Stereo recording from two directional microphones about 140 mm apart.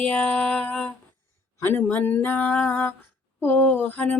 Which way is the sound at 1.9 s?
15° left (ahead or behind).